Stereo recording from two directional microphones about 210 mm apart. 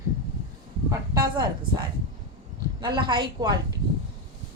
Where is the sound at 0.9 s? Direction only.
15° right (ahead or behind).